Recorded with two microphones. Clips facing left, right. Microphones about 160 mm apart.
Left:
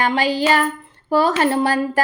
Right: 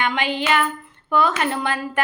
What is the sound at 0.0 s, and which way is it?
A woman's voice, 35° left (ahead or behind).